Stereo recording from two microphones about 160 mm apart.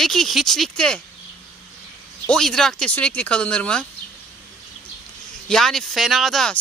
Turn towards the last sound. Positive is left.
turn(degrees=5)  # may be behind; listen again after turning